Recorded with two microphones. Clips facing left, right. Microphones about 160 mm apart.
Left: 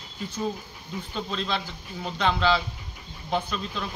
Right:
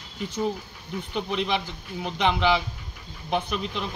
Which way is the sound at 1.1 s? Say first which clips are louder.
Right 4 dB; 15° right (ahead or behind).